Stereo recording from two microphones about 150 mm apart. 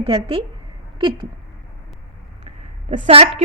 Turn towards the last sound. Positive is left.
turn(degrees=-45)  # may be behind; listen again after turning